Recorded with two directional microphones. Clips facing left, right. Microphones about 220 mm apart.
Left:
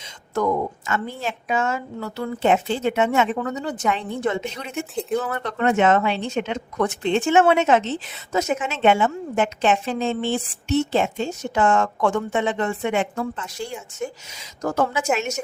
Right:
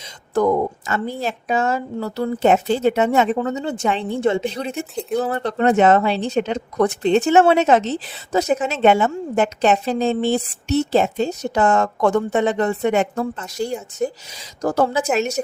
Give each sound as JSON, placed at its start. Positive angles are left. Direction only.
{"t": 0.3, "sound": "speech", "side_deg": -35}